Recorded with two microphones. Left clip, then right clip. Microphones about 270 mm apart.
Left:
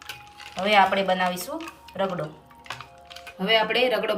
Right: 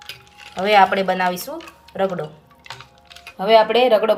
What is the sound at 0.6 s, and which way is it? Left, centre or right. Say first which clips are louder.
A woman's voice: right 5 dB; centre.